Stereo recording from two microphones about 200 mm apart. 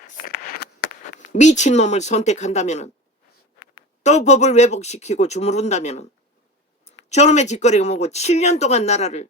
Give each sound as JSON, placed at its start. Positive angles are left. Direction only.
{"t": 0.3, "sound": "a sound", "side_deg": 50}
{"t": 1.2, "sound": "speech", "side_deg": 35}
{"t": 4.0, "sound": "speech", "side_deg": 35}
{"t": 7.1, "sound": "speech", "side_deg": 35}